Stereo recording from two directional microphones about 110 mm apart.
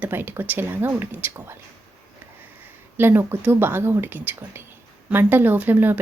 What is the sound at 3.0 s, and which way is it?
A woman's voice, 20° right (ahead or behind).